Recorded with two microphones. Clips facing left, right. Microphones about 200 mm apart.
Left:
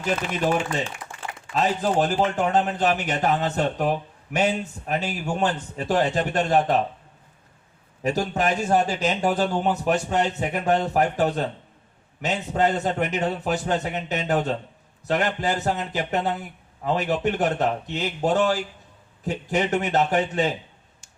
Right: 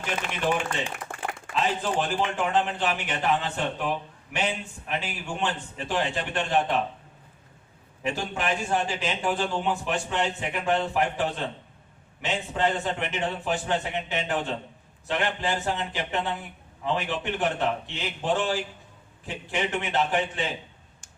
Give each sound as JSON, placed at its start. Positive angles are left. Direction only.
{"t": 0.0, "sound": "a man's voice", "side_deg": 40}
{"t": 1.1, "sound": "a sound", "side_deg": -55}
{"t": 1.5, "sound": "a man's voice", "side_deg": 40}
{"t": 8.0, "sound": "a man's voice", "side_deg": 40}